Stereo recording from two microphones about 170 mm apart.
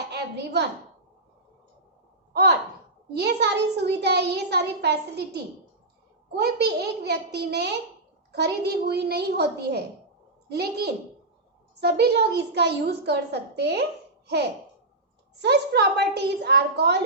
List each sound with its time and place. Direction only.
0.1 s a sound: 80° right
2.3 s a child's voice: 75° right (ahead or behind)
15.4 s a child's voice: 80° right